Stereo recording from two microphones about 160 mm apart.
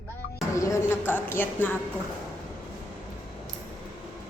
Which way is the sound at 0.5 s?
20° left (ahead or behind).